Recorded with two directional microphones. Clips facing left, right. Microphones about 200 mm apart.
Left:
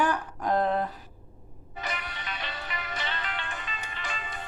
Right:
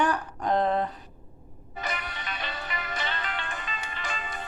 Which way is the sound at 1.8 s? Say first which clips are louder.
Right 2 dB; 45° right (ahead or behind).